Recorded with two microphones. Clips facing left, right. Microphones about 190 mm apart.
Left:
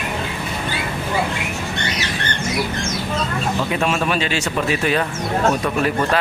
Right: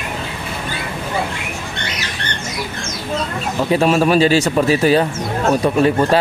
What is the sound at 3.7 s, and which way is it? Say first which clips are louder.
A man's voice: right 10 dB; 35° right (ahead or behind).